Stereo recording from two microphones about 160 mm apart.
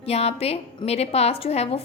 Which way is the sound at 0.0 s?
40° left (ahead or behind).